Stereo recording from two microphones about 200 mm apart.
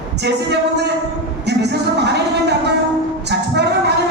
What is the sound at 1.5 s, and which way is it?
Speech, 55° right (ahead or behind).